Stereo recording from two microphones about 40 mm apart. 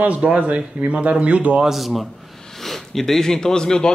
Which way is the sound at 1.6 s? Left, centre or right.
Centre.